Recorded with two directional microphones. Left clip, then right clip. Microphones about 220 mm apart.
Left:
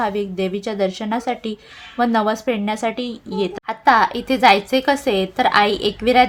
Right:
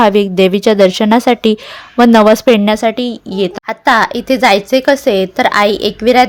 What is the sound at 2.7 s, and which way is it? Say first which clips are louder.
A woman's voice: right 9 dB; 30° right (ahead or behind).